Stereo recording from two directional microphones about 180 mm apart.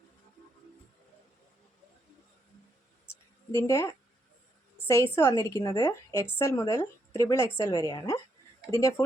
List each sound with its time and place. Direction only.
3.5 s a woman's voice: 15° left (ahead or behind)